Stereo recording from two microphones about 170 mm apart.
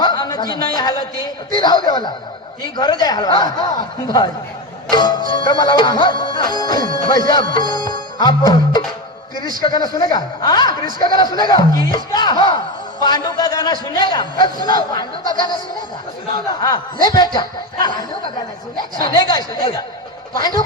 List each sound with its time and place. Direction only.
0.0 s a sound: 25° left (ahead or behind)
1.5 s a man's voice: 25° left (ahead or behind)
4.9 s a man's voice: 25° left (ahead or behind)
7.5 s music: 25° left (ahead or behind)
9.6 s a man's voice: 25° left (ahead or behind)
16.6 s a man's voice: 25° left (ahead or behind)
18.9 s a man's voice: 25° left (ahead or behind)